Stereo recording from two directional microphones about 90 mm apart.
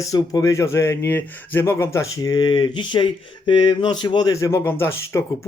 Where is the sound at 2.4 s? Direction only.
65° left (ahead or behind).